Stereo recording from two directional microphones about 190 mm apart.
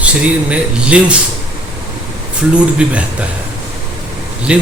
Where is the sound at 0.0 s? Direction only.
5° right (ahead or behind).